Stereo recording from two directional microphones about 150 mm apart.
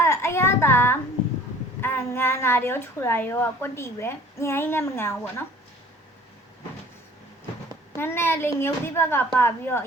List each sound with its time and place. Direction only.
0.0 s a sound: 20° left (ahead or behind)
1.8 s a woman's voice: 15° left (ahead or behind)
7.9 s a woman's voice: 15° left (ahead or behind)